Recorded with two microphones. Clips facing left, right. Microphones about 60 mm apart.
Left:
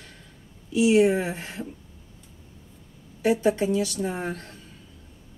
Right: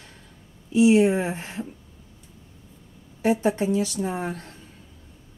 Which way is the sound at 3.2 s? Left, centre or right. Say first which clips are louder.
Even; right.